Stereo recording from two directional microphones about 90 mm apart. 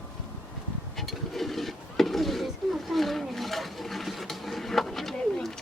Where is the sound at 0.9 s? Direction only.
Centre (ahead or behind).